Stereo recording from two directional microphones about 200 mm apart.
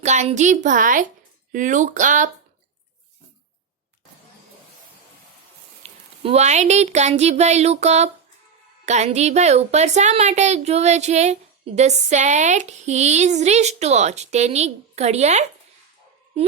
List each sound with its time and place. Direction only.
0.0 s a woman's voice: 35° right (ahead or behind)
5.8 s a woman's voice: 35° right (ahead or behind)